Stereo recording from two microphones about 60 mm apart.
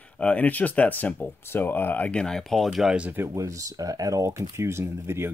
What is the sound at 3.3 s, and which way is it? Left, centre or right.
Speech, right.